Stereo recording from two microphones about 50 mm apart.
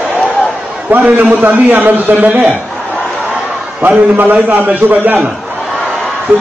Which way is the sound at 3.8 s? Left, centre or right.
Right.